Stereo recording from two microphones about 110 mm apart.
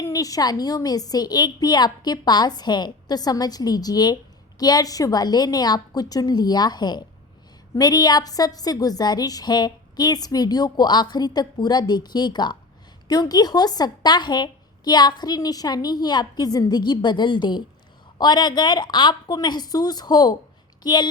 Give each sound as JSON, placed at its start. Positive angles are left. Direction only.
{"t": 0.0, "sound": "a woman's voice", "side_deg": 35}